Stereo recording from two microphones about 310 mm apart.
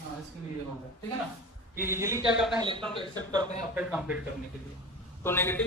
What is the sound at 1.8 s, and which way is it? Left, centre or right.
Speech, centre.